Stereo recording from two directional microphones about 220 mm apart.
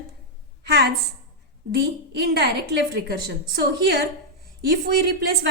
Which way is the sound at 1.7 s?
50° right (ahead or behind).